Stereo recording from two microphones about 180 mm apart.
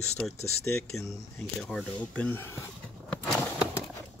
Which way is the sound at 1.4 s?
Centre (ahead or behind).